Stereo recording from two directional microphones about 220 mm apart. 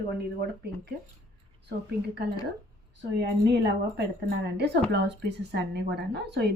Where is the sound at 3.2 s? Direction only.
50° right (ahead or behind).